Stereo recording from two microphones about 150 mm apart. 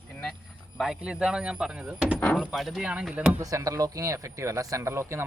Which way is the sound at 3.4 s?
20° right (ahead or behind).